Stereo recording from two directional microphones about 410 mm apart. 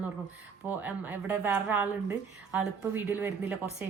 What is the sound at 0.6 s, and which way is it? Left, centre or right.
Speech, centre.